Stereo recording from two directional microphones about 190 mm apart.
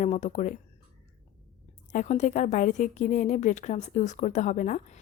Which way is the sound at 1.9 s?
40° left (ahead or behind).